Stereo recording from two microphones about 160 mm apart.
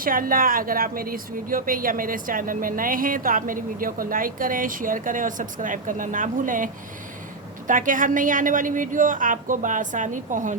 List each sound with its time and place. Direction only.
0.0 s a woman's voice: 60° right (ahead or behind)
7.7 s a woman's voice: 55° right (ahead or behind)